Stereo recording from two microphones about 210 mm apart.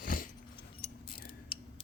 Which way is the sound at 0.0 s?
40° left (ahead or behind).